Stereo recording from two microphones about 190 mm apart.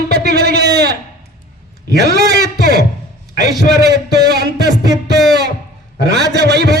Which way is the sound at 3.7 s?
60° right (ahead or behind).